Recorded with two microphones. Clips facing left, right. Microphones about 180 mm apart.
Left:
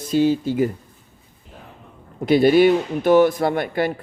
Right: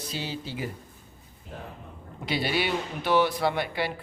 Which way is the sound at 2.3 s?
50° left (ahead or behind).